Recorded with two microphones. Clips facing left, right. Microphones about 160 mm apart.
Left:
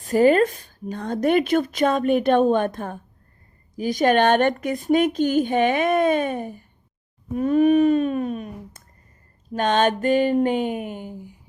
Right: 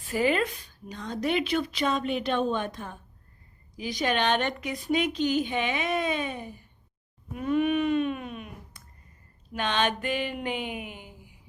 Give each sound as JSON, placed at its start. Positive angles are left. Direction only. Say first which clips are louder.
{"t": 0.0, "sound": "a woman's voice", "louder": "left 9 dB", "side_deg": 45}